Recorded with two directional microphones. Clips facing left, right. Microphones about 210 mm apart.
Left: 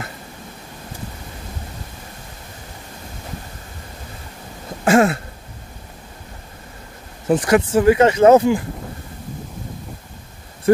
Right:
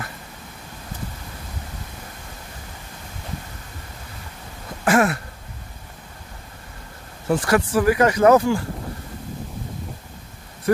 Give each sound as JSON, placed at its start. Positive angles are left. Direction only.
{"t": 4.8, "sound": "speech", "side_deg": 25}
{"t": 7.2, "sound": "speech", "side_deg": 20}